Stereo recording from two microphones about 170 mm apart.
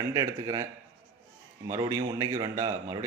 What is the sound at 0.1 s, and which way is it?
A man's voice, 20° right (ahead or behind).